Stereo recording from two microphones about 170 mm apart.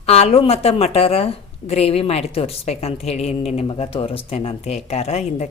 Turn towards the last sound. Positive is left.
turn(degrees=40)  # may be behind; listen again after turning